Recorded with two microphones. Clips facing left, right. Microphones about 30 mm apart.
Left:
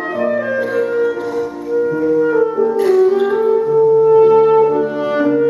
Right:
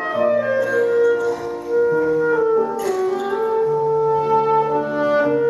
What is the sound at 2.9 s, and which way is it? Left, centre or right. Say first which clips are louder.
Music: left 11 dB; left.